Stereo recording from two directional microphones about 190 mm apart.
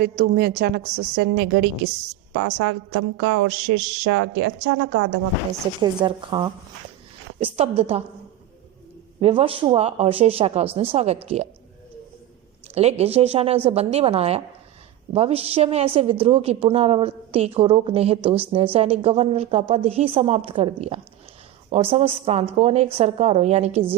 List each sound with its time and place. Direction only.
0.0 s a woman's voice: 60° right (ahead or behind)
2.4 s a woman's voice: 90° right
4.0 s a woman's voice: 70° right (ahead or behind)
5.8 s a woman's voice: 25° right (ahead or behind)
7.5 s a woman's voice: 30° right (ahead or behind)
9.2 s a woman's voice: 30° right (ahead or behind)
12.7 s a woman's voice: 35° right (ahead or behind)